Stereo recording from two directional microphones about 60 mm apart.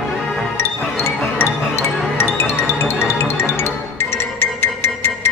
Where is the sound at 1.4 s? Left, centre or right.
Left.